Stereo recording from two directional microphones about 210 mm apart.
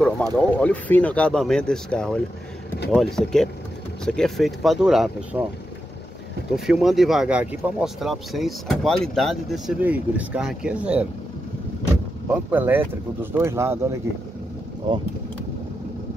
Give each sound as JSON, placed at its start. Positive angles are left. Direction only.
{"t": 0.0, "sound": "speech", "side_deg": 5}
{"t": 6.5, "sound": "speech", "side_deg": 0}
{"t": 12.4, "sound": "speech", "side_deg": -10}
{"t": 14.8, "sound": "speech", "side_deg": -25}